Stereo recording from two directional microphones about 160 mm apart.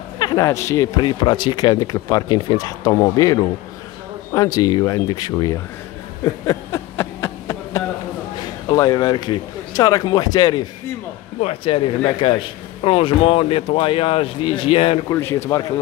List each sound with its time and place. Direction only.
0.2 s speech: 20° left (ahead or behind)
4.6 s speech: 25° left (ahead or behind)
6.4 s a sound: 20° left (ahead or behind)
8.6 s a man's voice: 25° left (ahead or behind)
15.0 s a man's voice: 15° left (ahead or behind)